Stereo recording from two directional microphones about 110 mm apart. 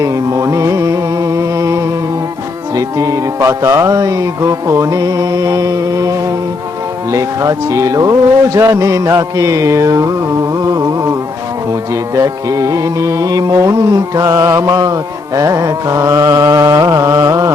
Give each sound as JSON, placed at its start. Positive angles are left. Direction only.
{"t": 0.0, "sound": "music", "side_deg": -30}
{"t": 12.1, "sound": "music", "side_deg": -30}